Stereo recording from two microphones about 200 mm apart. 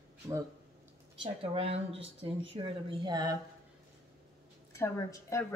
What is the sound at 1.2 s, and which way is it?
Speech, 30° right (ahead or behind).